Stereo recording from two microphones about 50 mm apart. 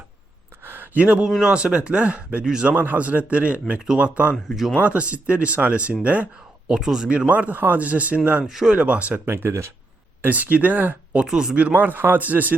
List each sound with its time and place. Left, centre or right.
0.6 s a sound: right
0.9 s speech: right
2.4 s speech: centre
2.6 s speech: right
6.7 s speech: centre
7.3 s speech: right
8.4 s speech: centre
8.8 s speech: right
9.2 s speech: right
10.2 s speech: right
11.3 s speech: centre
11.5 s speech: right